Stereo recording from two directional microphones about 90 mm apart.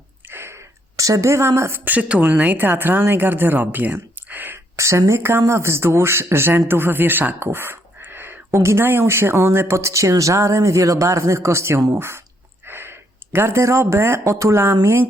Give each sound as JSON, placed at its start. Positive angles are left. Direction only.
{"t": 0.3, "sound": "a sound", "side_deg": -25}
{"t": 1.8, "sound": "speech", "side_deg": -15}
{"t": 4.8, "sound": "speech", "side_deg": -30}